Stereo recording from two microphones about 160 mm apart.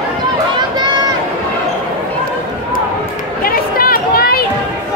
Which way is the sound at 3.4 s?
65° left (ahead or behind).